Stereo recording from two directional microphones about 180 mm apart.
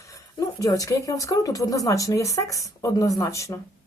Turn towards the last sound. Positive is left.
turn(degrees=15)  # may be behind; listen again after turning